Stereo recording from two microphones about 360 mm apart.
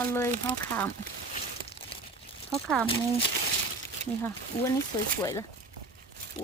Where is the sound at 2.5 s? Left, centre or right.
Centre.